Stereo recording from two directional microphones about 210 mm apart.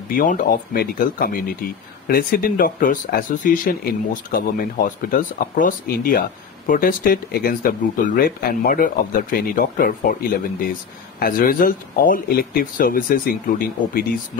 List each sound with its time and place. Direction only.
0.1 s speech: 40° left (ahead or behind)